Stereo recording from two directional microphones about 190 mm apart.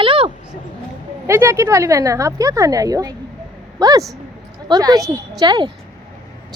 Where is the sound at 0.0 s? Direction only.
30° right (ahead or behind).